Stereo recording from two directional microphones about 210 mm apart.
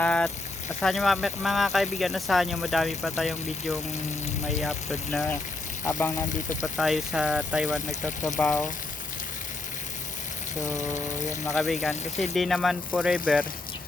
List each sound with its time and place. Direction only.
0.0 s a sound: 5° left (ahead or behind)
0.8 s speech: centre (ahead or behind)
6.7 s speech: centre (ahead or behind)
8.4 s speech: 10° left (ahead or behind)
10.8 s a sound: 35° left (ahead or behind)
11.6 s speech: centre (ahead or behind)